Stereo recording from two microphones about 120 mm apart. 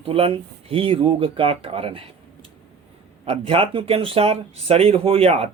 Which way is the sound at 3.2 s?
55° right (ahead or behind).